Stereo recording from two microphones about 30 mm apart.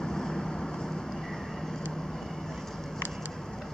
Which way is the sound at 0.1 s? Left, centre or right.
Centre.